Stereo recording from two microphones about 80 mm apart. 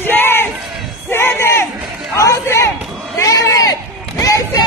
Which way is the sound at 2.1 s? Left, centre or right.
Left.